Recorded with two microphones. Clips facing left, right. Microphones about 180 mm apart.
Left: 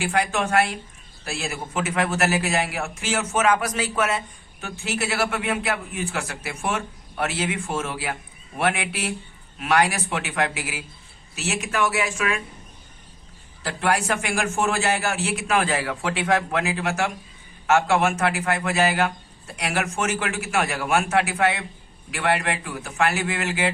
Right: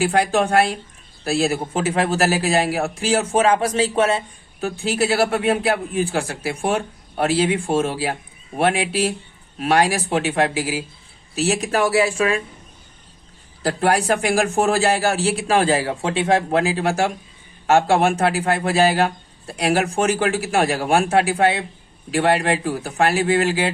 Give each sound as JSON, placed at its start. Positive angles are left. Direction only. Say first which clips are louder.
{"t": 0.0, "sound": "a man's voice", "louder": "right 6 dB", "side_deg": -35}
{"t": 13.6, "sound": "a man's voice", "louder": "right 5 dB", "side_deg": -40}